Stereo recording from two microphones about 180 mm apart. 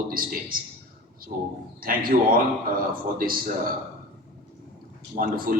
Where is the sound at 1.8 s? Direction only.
55° right (ahead or behind).